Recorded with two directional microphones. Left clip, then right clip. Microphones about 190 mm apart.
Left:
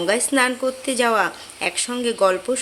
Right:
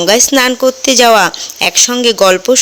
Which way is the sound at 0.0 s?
40° right (ahead or behind).